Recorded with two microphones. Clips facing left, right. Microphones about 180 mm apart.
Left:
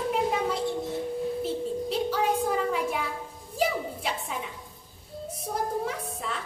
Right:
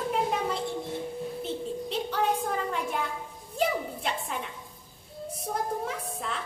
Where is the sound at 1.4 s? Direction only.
5° left (ahead or behind).